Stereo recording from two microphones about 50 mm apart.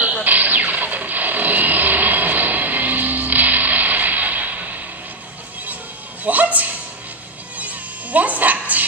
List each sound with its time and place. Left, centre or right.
0.0 s music: right
6.2 s music: right